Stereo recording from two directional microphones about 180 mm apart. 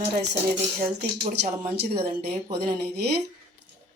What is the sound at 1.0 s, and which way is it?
Speech, 65° right (ahead or behind).